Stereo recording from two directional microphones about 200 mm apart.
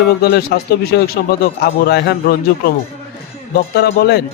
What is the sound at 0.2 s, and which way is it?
A man's voice, 55° left (ahead or behind).